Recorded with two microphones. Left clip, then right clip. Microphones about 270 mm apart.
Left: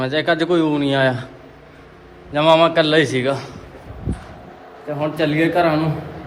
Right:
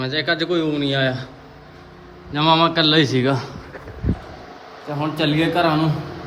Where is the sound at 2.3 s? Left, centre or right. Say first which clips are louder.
Left 3 dB; centre.